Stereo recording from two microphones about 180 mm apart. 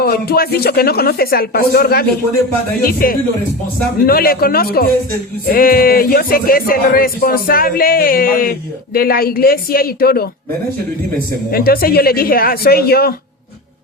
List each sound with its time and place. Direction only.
0.0 s speech: 55° left (ahead or behind)
11.5 s speech: 55° left (ahead or behind)